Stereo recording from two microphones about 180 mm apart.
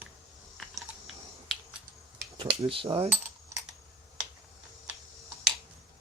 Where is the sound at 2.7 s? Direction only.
30° right (ahead or behind).